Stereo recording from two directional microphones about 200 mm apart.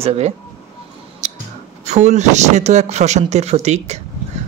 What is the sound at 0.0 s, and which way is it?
Speech, 30° right (ahead or behind).